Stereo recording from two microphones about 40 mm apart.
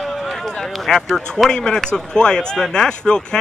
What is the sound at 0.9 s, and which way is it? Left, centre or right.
Speech, centre.